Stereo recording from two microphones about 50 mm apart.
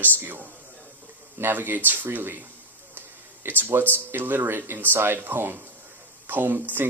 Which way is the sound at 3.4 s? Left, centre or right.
Right.